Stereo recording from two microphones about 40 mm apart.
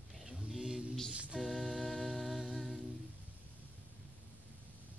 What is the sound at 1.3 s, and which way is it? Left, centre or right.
Music, centre.